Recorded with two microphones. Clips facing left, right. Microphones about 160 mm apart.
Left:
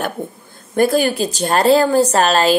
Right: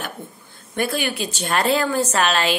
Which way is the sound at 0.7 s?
40° left (ahead or behind).